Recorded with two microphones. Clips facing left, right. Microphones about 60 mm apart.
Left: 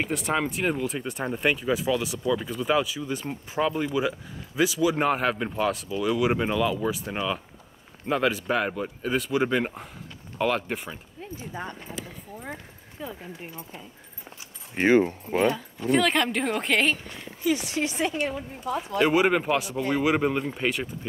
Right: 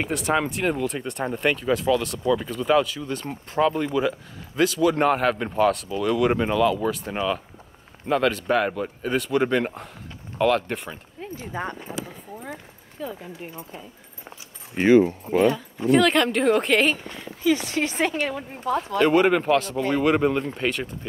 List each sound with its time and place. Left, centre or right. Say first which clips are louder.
0.0 s speech: right 3 dB; centre
11.2 s clip-clop: right 5 dB; right
11.6 s speech: right 6 dB; right
13.0 s speech: right 4 dB; centre
14.8 s speech: right 4 dB; left
15.9 s speech: right 4 dB; centre
17.1 s speech: right 4 dB; right
18.9 s speech: right 3 dB; centre